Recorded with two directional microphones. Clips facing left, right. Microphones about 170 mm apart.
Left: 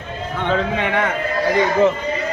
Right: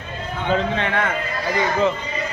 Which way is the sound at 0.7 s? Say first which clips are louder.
Left 2 dB; 15° left (ahead or behind).